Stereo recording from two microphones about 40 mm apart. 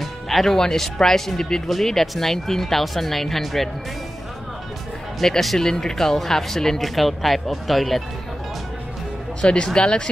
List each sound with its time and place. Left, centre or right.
0.0 s music: centre
0.6 s speech: centre
5.2 s speech: centre
9.4 s speech: left